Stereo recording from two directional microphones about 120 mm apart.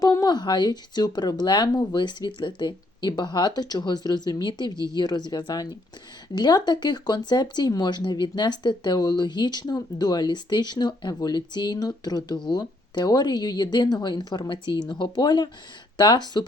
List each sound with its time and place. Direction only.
0.0 s speech: 30° left (ahead or behind)